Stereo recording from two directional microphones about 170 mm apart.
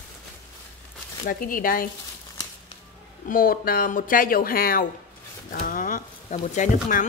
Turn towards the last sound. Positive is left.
turn(degrees=45)  # may be behind; listen again after turning